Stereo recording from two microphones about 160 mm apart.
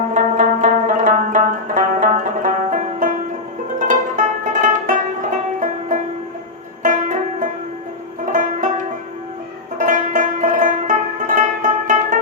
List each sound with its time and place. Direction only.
0.1 s music: 55° right (ahead or behind)
9.7 s music: 55° right (ahead or behind)